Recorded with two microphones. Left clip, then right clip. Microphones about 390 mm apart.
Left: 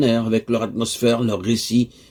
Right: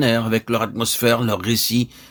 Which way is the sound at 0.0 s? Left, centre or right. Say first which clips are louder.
Even; right.